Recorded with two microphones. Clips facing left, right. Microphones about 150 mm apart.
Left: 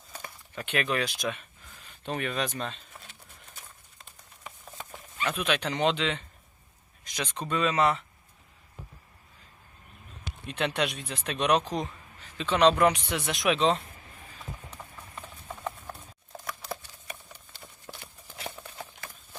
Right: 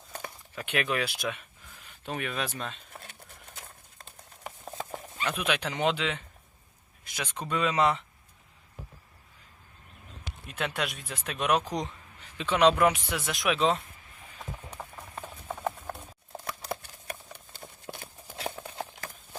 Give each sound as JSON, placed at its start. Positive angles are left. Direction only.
{"t": 0.5, "sound": "speech", "side_deg": -10}
{"t": 5.2, "sound": "speech", "side_deg": -10}
{"t": 10.4, "sound": "speech", "side_deg": 0}
{"t": 15.9, "sound": "clip-clop", "side_deg": -30}
{"t": 17.1, "sound": "a sound", "side_deg": -60}
{"t": 17.9, "sound": "horse", "side_deg": -20}
{"t": 18.3, "sound": "clip-clop", "side_deg": -35}
{"t": 18.9, "sound": "horse", "side_deg": -45}